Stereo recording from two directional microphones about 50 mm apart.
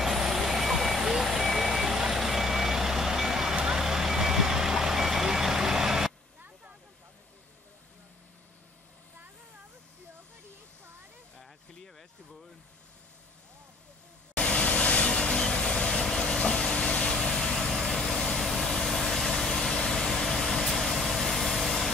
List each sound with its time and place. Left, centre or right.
0.0 s vehicle: centre
3.6 s reversing beeps: centre
14.3 s vehicle: left; by 21.9 s centre